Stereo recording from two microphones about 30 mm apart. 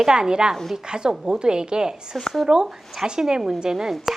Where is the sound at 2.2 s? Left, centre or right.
Centre.